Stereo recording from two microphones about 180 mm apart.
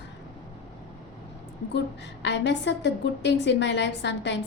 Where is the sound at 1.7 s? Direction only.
75° left (ahead or behind).